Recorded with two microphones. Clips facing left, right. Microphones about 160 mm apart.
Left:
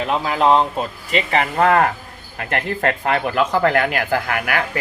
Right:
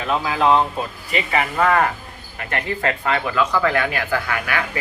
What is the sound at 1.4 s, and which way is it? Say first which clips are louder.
Speech: left 2 dB; 50° left (ahead or behind).